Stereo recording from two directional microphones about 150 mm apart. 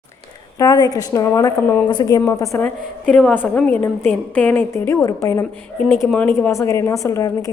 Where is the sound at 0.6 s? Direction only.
25° left (ahead or behind).